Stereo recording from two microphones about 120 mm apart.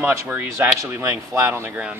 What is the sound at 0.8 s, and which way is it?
A man's voice, 25° right (ahead or behind).